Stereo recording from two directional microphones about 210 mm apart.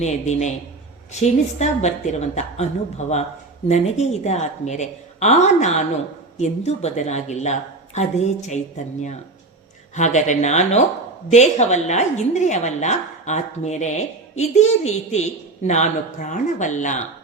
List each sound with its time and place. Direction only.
0.0 s a woman's voice: 35° left (ahead or behind)